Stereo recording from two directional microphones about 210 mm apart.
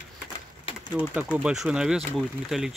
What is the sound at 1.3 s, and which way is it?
Speech, centre (ahead or behind).